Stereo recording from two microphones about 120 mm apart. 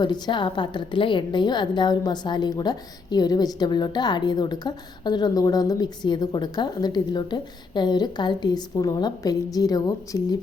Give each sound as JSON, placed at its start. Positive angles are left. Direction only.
{"t": 0.0, "sound": "a woman's voice", "side_deg": 40}